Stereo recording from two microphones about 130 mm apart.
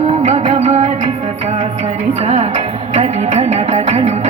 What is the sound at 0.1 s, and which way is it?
Music, 55° right (ahead or behind).